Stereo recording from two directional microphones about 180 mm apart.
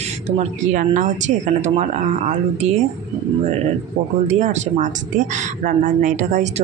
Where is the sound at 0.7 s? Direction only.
45° right (ahead or behind).